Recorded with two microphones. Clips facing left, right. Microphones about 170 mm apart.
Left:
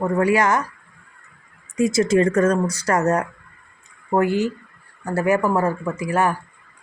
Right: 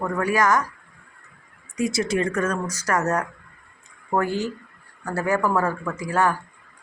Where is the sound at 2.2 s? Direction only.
40° left (ahead or behind).